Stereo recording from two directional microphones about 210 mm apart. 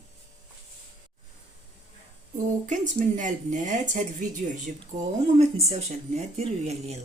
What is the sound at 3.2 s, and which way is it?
Speech, 35° right (ahead or behind).